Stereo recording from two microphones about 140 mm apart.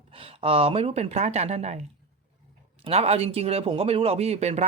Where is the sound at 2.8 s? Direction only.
45° right (ahead or behind).